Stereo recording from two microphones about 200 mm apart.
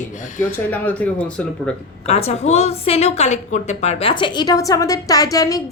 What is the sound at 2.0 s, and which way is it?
A woman's voice, 30° left (ahead or behind).